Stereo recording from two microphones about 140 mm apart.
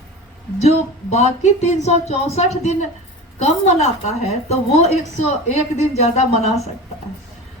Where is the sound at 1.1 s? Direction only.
55° left (ahead or behind).